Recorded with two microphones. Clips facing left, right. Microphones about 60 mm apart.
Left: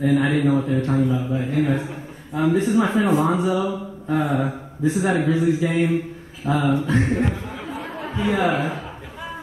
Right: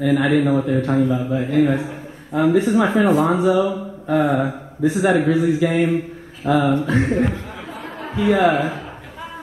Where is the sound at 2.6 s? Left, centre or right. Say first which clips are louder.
Right 2 dB; right.